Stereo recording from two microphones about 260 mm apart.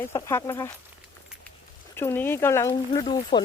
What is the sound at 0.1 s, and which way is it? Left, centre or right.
Speech, centre.